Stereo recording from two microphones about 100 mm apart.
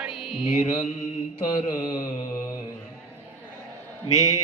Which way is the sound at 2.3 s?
30° left (ahead or behind).